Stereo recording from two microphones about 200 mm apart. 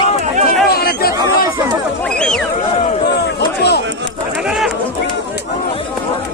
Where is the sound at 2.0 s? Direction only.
5° left (ahead or behind).